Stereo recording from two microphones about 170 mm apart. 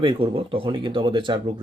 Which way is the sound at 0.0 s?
30° right (ahead or behind).